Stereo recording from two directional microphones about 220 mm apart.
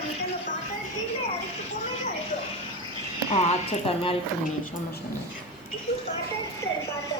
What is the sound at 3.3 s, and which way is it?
Speech, 30° left (ahead or behind).